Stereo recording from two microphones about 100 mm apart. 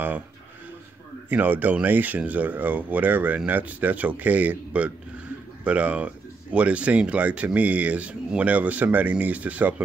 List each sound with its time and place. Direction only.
1.3 s speech: 15° right (ahead or behind)